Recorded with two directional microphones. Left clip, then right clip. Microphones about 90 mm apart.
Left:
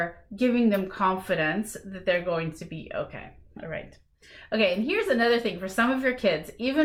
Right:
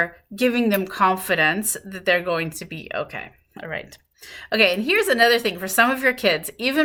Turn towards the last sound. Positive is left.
turn(degrees=-35)  # may be behind; listen again after turning